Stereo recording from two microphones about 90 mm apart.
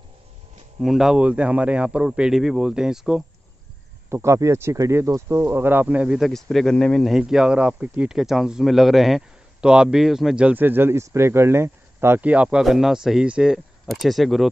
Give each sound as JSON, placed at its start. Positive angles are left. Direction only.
{"t": 0.7, "sound": "a man's voice", "side_deg": -5}
{"t": 4.1, "sound": "speech", "side_deg": -30}
{"t": 6.1, "sound": "speech", "side_deg": 0}
{"t": 7.2, "sound": "a man's voice", "side_deg": -5}
{"t": 8.1, "sound": "a man's voice", "side_deg": -5}
{"t": 12.2, "sound": "speech", "side_deg": -15}